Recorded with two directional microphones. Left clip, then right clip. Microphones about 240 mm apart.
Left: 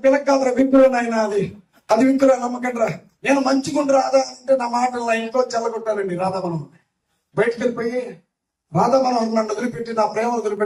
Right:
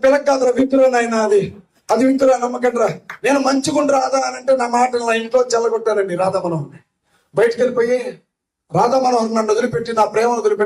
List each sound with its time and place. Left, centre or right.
0.1 s speech: right
7.3 s speech: right